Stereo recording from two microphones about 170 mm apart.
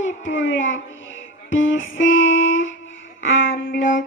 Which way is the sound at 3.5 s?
50° left (ahead or behind).